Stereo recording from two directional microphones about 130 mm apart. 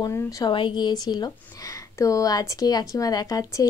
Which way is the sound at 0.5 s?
40° left (ahead or behind).